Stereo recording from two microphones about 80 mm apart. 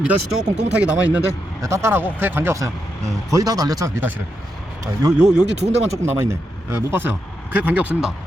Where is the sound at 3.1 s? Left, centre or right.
Right.